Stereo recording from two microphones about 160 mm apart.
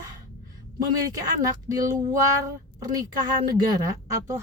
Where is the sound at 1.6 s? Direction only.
20° right (ahead or behind).